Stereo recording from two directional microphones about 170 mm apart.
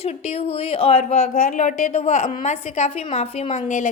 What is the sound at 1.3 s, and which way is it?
A woman's voice, 55° left (ahead or behind).